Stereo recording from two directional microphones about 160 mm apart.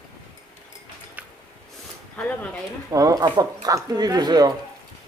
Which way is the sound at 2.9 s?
20° right (ahead or behind).